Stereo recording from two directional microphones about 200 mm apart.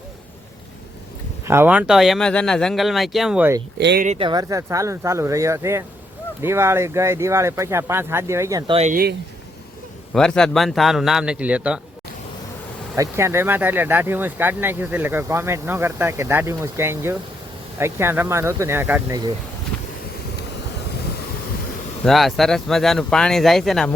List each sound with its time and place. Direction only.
1.5 s speech: 10° right (ahead or behind)
3.8 s speech: 60° right (ahead or behind)
4.0 s speech: 35° right (ahead or behind)
4.3 s speech: 20° right (ahead or behind)
8.9 s speech: 50° right (ahead or behind)
10.2 s speech: 5° left (ahead or behind)
13.0 s speech: 15° right (ahead or behind)
22.0 s speech: centre (ahead or behind)